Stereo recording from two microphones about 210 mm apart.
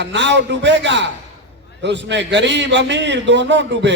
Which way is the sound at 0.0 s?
60° right (ahead or behind).